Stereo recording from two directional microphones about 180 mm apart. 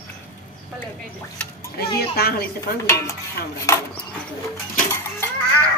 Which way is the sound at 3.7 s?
15° left (ahead or behind).